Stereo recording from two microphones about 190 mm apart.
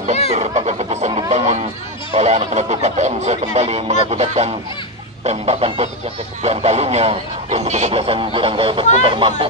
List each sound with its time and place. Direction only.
0.3 s chicken: 35° right (ahead or behind)
1.3 s music: 35° right (ahead or behind)
2.1 s speech: 35° right (ahead or behind)